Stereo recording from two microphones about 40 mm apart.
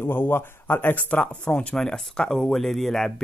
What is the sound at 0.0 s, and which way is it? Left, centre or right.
Speech, left.